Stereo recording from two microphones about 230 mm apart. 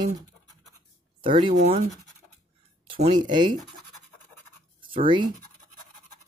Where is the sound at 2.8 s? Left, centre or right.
Right.